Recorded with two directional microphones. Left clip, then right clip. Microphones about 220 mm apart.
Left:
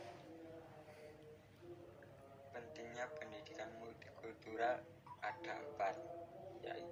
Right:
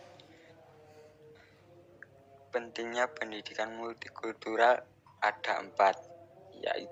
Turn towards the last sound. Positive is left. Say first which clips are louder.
# right 14 dB
turn(degrees=-45)  # may be behind; listen again after turning